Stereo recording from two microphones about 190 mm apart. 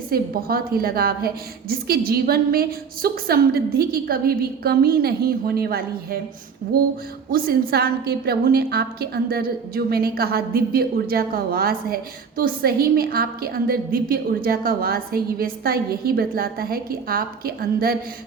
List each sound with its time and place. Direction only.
0.1 s a woman's voice: 50° right (ahead or behind)
7.3 s a woman's voice: 50° right (ahead or behind)